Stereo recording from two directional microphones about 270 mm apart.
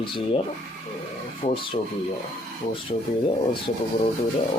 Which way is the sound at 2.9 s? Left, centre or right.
Left.